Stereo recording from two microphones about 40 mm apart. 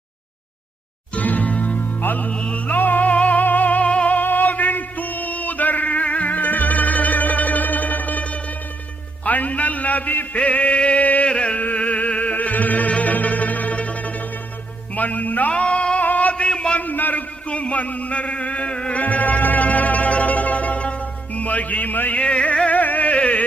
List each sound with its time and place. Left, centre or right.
1.1 s music: left
2.0 s music: left
2.3 s music: left
2.7 s music: left
4.2 s a sound: left
10.3 s chant: left
11.3 s music: left
11.5 s music: left
16.0 s a sound: left
16.8 s a sound: left
17.5 s a sound: left
19.0 s music: left
22.2 s music: left